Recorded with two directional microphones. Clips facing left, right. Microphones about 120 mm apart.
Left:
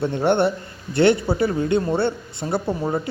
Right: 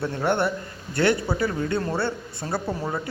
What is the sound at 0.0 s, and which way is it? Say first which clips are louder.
A man's voice: left 5 dB; 25° left (ahead or behind).